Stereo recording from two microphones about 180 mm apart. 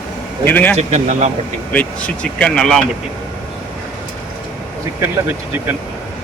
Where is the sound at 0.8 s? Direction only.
40° right (ahead or behind).